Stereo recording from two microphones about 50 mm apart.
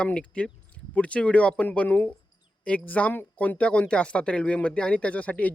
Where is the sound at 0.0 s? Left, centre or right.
Left.